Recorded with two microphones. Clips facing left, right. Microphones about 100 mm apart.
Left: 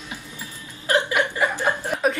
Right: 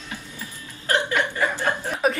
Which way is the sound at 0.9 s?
15° left (ahead or behind).